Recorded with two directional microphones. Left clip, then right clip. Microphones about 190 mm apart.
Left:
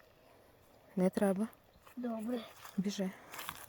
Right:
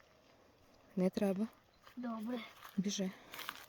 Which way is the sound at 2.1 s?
25° right (ahead or behind).